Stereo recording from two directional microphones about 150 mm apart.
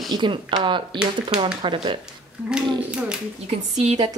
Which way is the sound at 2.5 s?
5° right (ahead or behind).